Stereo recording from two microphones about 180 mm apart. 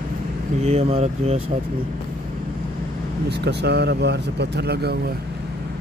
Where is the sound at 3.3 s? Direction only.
70° right (ahead or behind).